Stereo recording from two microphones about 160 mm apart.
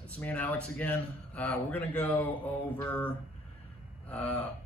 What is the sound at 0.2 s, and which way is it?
A man's voice, 10° left (ahead or behind).